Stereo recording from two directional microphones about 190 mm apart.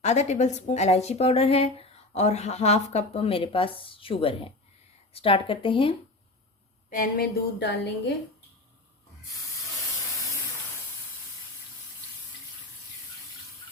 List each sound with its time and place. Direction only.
0.0 s a woman's voice: 35° left (ahead or behind)
6.9 s a woman's voice: 50° left (ahead or behind)